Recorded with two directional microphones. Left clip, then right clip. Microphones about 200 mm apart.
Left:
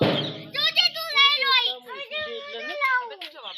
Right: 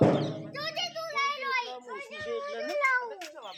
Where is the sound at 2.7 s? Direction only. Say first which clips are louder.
Left 3 dB; 50° left (ahead or behind).